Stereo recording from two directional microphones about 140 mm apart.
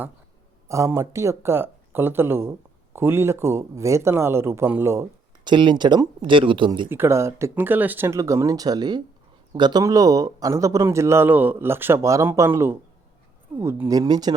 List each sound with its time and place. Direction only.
0.7 s speech: 20° right (ahead or behind)
5.5 s speech: 35° right (ahead or behind)
6.9 s a man's voice: 20° right (ahead or behind)